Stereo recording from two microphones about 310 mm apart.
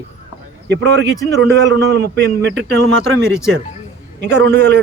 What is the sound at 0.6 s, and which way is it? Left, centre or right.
A man's voice, right.